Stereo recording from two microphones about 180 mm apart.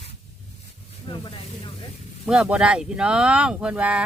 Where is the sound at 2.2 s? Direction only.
5° right (ahead or behind).